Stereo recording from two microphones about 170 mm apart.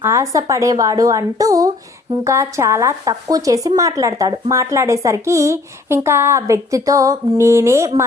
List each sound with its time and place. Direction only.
0.0 s speech: 15° right (ahead or behind)